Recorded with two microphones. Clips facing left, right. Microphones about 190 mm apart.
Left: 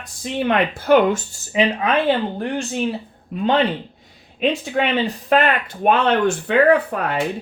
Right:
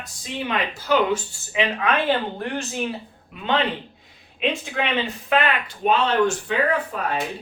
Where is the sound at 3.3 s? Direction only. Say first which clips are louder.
Left 14 dB; 40° left (ahead or behind).